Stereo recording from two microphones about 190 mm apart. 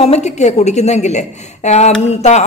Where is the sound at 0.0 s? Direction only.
35° left (ahead or behind).